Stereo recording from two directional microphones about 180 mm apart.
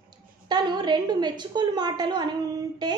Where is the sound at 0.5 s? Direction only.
25° right (ahead or behind).